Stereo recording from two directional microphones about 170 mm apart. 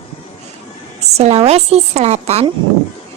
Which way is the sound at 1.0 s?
40° right (ahead or behind).